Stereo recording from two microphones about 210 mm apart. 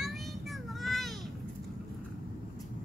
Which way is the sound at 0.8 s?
Centre (ahead or behind).